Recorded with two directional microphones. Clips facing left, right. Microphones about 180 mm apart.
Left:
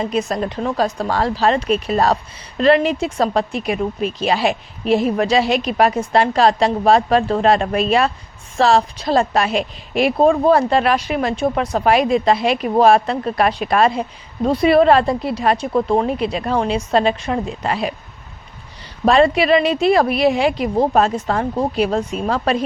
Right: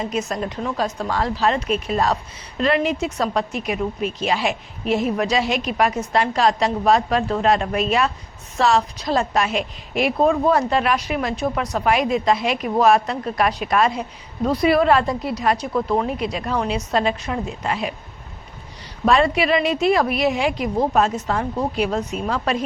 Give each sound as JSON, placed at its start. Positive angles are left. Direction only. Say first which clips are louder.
{"t": 0.0, "sound": "a woman's voice", "louder": "left 4 dB", "side_deg": 30}
{"t": 19.0, "sound": "speech", "louder": "left 4 dB", "side_deg": 30}